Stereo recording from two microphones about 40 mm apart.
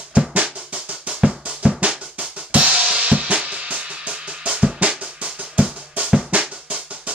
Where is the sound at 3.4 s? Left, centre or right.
Right.